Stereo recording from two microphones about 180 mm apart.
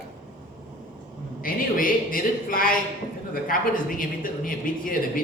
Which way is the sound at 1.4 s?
50° left (ahead or behind).